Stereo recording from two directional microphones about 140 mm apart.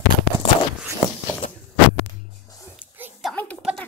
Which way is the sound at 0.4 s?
40° left (ahead or behind).